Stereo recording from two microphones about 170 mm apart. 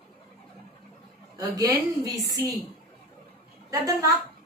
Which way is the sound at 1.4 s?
20° right (ahead or behind).